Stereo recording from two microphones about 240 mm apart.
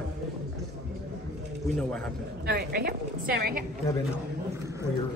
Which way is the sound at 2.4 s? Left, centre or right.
Right.